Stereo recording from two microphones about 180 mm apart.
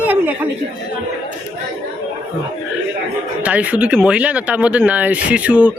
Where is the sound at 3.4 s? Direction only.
10° right (ahead or behind).